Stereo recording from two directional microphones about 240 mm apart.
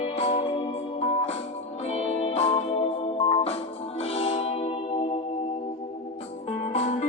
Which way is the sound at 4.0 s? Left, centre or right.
Left.